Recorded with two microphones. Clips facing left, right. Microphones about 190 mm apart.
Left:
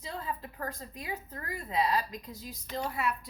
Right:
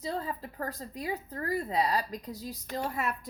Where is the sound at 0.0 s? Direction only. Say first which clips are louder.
Right 4 dB; 35° right (ahead or behind).